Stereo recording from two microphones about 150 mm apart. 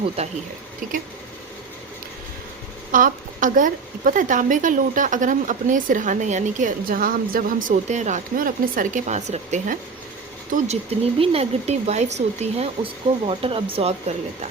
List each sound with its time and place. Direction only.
2.9 s a woman's voice: 65° right (ahead or behind); by 13.9 s 40° right (ahead or behind)